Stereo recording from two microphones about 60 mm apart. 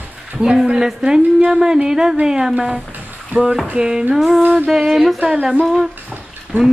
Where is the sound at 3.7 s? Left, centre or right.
Centre.